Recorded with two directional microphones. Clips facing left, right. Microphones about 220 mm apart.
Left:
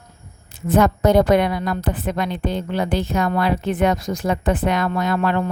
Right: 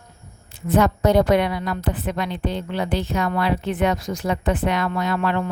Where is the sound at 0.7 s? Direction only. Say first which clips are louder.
Left 2 dB; 50° left (ahead or behind).